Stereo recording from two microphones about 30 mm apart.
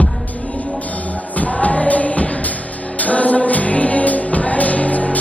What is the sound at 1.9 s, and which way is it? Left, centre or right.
Music, left.